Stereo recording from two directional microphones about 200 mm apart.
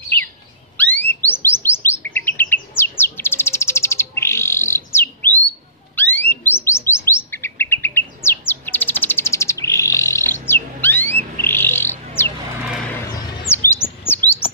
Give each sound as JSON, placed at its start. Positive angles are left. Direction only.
{"t": 0.7, "sound": "a sound", "side_deg": 10}
{"t": 1.2, "sound": "chirp", "side_deg": 10}
{"t": 11.3, "sound": "bird", "side_deg": 10}
{"t": 13.5, "sound": "chirp", "side_deg": 30}
{"t": 14.0, "sound": "chirp", "side_deg": 10}